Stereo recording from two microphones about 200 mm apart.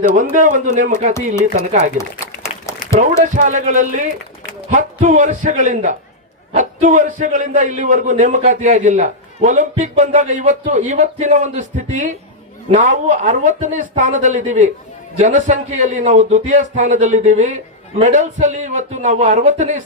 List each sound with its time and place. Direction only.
0.1 s a man's voice: 40° right (ahead or behind)
3.0 s a man's voice: 40° right (ahead or behind)